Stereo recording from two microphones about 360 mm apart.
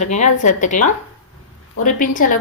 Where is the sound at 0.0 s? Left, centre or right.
Centre.